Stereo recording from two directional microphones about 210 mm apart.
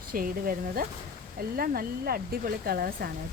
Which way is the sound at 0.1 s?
45° right (ahead or behind).